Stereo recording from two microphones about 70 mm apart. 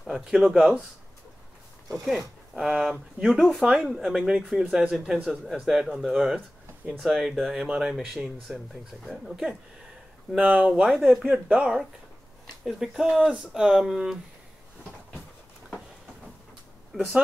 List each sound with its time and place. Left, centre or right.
0.3 s speech: centre
1.9 s speech: centre
3.3 s speech: centre
3.6 s speech: centre
10.4 s speech: centre
10.7 s speech: centre
11.5 s speech: centre
16.9 s speech: centre